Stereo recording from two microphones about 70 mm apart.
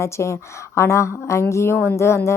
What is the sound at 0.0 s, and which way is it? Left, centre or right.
A woman's voice, left.